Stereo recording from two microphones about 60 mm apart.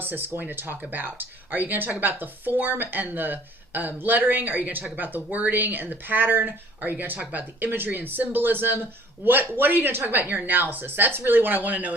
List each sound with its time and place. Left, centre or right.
0.0 s speech: right